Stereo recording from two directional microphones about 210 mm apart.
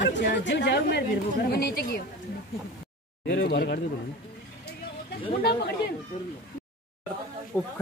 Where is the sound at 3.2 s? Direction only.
55° left (ahead or behind).